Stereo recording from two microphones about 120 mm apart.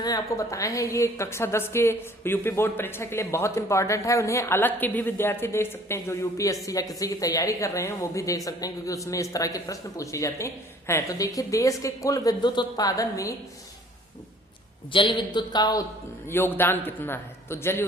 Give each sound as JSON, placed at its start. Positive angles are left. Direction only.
{"t": 0.0, "sound": "a woman's voice", "side_deg": 30}
{"t": 14.9, "sound": "speech", "side_deg": 40}
{"t": 16.3, "sound": "a woman's voice", "side_deg": 20}